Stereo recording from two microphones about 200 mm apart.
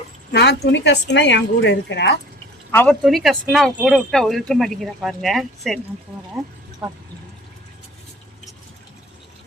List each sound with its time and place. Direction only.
0.3 s a woman's voice: 55° left (ahead or behind)
2.7 s speech: 5° left (ahead or behind)
6.8 s speech: 5° right (ahead or behind)